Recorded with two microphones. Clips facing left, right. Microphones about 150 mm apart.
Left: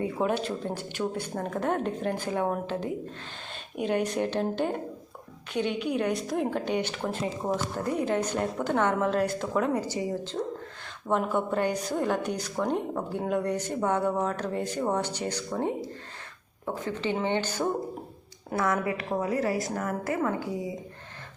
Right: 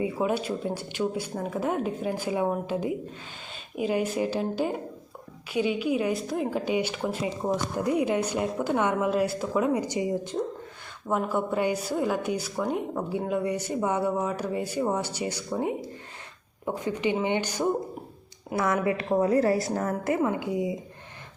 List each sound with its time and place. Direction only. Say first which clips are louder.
0.0 s a woman's voice: right 1 dB; 5° right (ahead or behind)
11.1 s a woman's voice: even; 5° right (ahead or behind)